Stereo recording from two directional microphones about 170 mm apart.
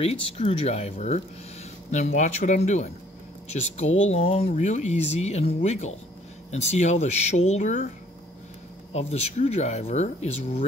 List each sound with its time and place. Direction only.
0.0 s speech: 35° left (ahead or behind)
8.9 s speech: 40° left (ahead or behind)